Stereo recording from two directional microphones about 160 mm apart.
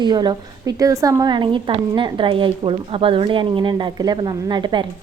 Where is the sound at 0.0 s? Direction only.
25° right (ahead or behind).